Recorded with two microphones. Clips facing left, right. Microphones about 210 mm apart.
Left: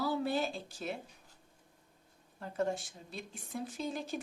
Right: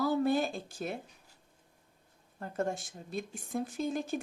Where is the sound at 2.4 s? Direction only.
50° right (ahead or behind).